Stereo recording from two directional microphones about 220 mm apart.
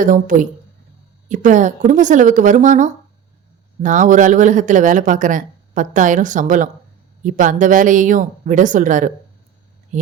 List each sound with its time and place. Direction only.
0.0 s speech: 35° right (ahead or behind)